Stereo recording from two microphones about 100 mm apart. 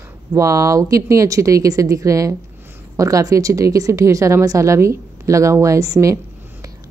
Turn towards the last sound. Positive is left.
turn(degrees=-30)  # may be behind; listen again after turning